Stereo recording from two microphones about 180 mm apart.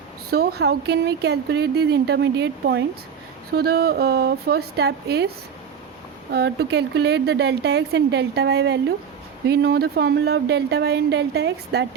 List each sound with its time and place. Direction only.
0.3 s speech: 60° right (ahead or behind)
6.3 s speech: 65° right (ahead or behind)